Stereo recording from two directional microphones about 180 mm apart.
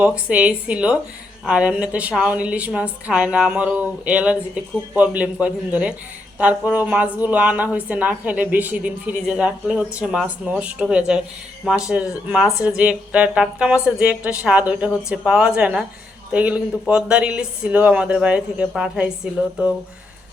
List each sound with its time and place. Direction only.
0.3 s a woman's voice: 5° right (ahead or behind)